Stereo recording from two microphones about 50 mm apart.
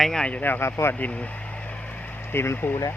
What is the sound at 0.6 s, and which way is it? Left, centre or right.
Speech, left.